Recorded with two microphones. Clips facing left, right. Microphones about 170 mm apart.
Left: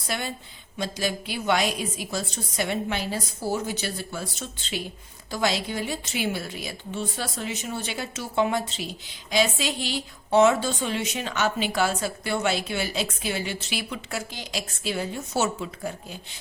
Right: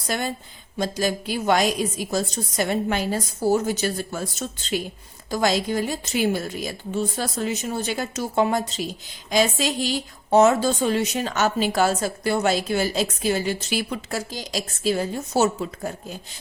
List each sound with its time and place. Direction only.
0.1 s a woman's voice: 45° right (ahead or behind)